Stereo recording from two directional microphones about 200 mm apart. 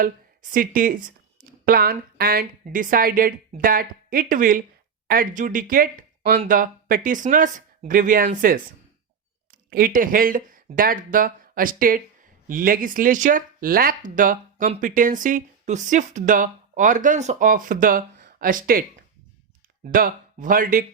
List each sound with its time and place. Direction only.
0.5 s speech: 45° right (ahead or behind)